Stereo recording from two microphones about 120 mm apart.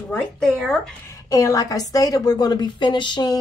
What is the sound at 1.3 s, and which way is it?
A woman's voice, 25° left (ahead or behind).